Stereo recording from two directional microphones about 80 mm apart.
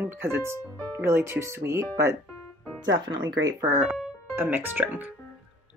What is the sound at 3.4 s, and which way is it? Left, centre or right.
Speech, right.